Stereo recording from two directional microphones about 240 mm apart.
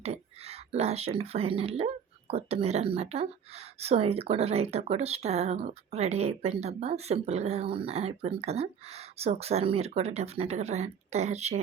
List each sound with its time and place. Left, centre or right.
0.0 s speech: right